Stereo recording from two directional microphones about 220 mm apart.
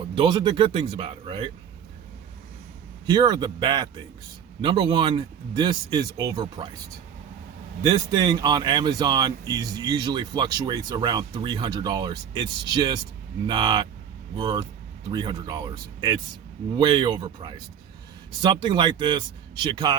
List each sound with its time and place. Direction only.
0.0 s speech: 20° right (ahead or behind)
3.1 s speech: 20° right (ahead or behind)
7.8 s speech: 20° right (ahead or behind)